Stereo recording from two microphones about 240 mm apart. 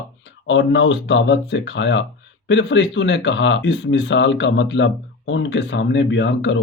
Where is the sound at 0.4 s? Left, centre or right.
Left.